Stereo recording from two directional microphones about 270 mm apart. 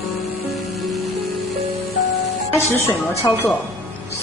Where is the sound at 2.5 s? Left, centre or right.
Centre.